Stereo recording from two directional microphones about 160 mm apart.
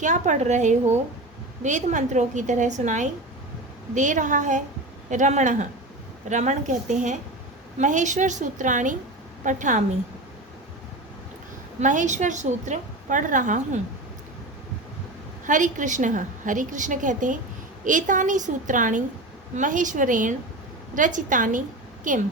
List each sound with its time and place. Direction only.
0.0 s a woman's voice: 50° right (ahead or behind)
11.8 s a woman's voice: 50° right (ahead or behind)
15.4 s a woman's voice: 50° right (ahead or behind)